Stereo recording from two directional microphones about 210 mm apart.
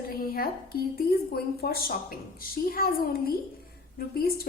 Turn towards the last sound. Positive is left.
turn(degrees=45)  # may be behind; listen again after turning